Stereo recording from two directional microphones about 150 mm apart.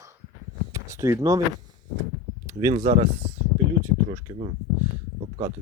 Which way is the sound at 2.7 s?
50° right (ahead or behind).